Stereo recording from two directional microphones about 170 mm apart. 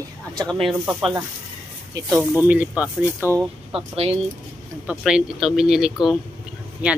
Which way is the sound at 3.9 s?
35° right (ahead or behind).